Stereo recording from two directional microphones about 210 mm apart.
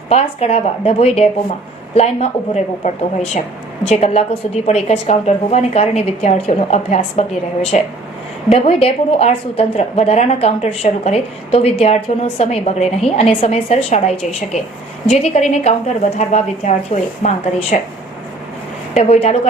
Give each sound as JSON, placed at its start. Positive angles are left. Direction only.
{"t": 0.1, "sound": "a woman's voice", "side_deg": 30}
{"t": 18.9, "sound": "a woman's voice", "side_deg": 30}